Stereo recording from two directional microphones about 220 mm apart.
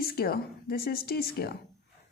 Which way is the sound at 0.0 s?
45° left (ahead or behind).